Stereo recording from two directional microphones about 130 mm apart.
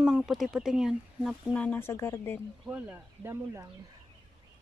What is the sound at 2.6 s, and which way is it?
Speech, 15° right (ahead or behind).